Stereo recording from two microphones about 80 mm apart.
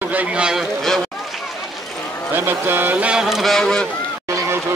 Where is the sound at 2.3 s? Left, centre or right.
Right; by 3.8 s centre.